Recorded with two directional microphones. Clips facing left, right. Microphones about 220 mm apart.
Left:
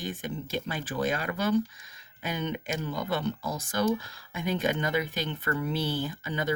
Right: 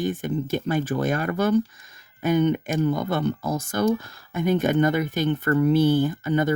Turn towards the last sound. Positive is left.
turn(degrees=-50)  # may be behind; listen again after turning